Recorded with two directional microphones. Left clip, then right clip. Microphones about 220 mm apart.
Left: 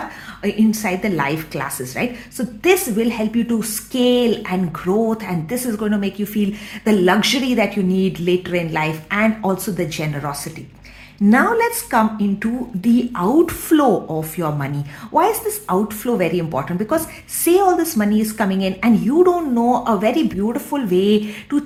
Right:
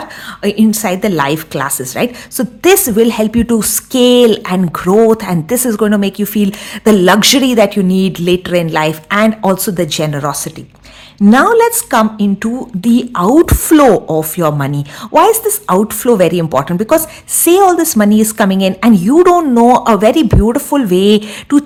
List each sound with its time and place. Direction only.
0.4 s a woman's voice: 45° right (ahead or behind)